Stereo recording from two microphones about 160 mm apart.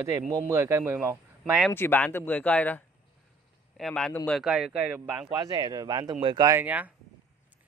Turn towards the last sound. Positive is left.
turn(degrees=-10)  # may be behind; listen again after turning